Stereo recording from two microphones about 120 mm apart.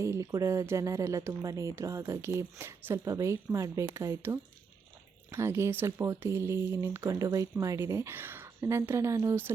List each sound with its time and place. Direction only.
0.0 s speech: 25° right (ahead or behind)